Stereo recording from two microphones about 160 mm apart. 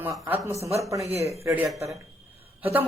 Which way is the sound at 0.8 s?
20° right (ahead or behind).